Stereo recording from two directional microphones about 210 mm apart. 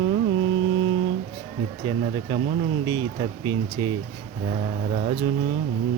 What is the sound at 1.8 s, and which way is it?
Speech, 20° right (ahead or behind).